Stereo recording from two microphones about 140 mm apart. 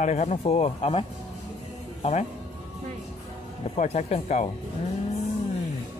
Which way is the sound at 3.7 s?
50° left (ahead or behind).